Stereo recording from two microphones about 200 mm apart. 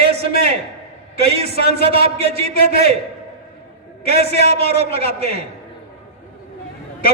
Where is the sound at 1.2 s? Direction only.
30° right (ahead or behind).